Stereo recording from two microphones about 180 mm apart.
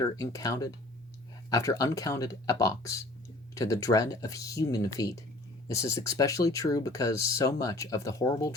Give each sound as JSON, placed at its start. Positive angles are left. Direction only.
{"t": 0.0, "sound": "speech", "side_deg": 20}